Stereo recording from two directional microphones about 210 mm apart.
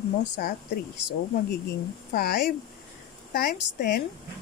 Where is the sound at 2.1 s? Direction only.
45° left (ahead or behind).